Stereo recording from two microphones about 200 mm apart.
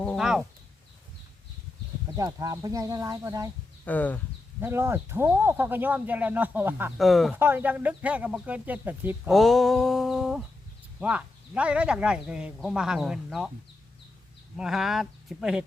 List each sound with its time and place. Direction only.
0.0 s speech: centre (ahead or behind)
2.0 s speech: 20° right (ahead or behind)
3.8 s speech: 10° left (ahead or behind)
4.6 s speech: 10° right (ahead or behind)
7.0 s speech: centre (ahead or behind)
7.3 s speech: 10° right (ahead or behind)
9.3 s a sound: centre (ahead or behind)
11.0 s speech: 5° right (ahead or behind)
14.5 s speech: centre (ahead or behind)